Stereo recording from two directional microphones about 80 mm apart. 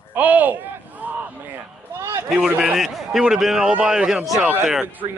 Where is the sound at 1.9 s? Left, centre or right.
Right.